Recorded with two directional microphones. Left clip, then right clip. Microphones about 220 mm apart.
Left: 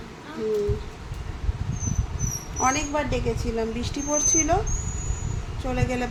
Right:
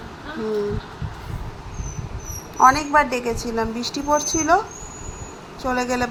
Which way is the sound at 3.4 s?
10° right (ahead or behind).